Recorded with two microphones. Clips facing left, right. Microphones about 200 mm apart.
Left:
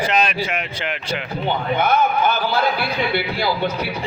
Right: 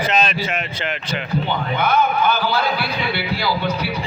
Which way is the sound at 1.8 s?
50° left (ahead or behind).